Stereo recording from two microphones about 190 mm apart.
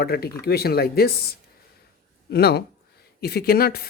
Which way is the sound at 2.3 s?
55° left (ahead or behind).